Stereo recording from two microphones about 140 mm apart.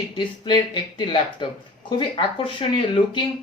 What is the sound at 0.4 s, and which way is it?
Speech, 35° left (ahead or behind).